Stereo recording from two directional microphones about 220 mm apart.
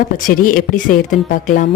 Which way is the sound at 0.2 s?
40° left (ahead or behind).